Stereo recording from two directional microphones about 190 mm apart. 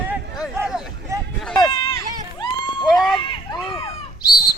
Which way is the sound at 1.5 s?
20° left (ahead or behind).